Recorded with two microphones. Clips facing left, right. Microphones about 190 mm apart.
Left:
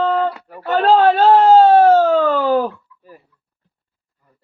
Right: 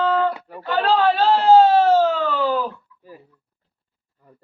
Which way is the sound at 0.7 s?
50° left (ahead or behind).